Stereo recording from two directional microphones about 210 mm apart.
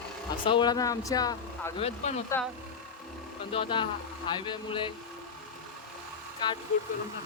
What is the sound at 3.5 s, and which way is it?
Speech, 25° left (ahead or behind).